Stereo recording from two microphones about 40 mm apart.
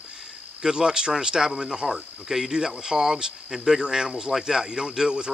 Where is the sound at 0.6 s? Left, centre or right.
Centre.